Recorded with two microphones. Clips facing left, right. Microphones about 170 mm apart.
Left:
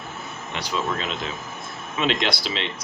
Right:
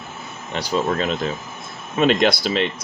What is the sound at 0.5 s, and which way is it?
Speech, 40° right (ahead or behind).